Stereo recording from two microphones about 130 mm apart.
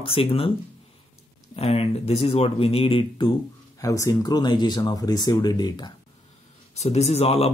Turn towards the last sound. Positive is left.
turn(degrees=55)  # may be behind; listen again after turning